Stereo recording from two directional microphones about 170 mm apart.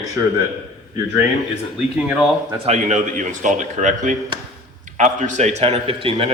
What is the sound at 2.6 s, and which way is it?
A man's voice, 45° right (ahead or behind).